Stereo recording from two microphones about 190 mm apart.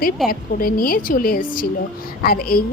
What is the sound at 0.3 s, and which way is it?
A woman's voice, 50° left (ahead or behind).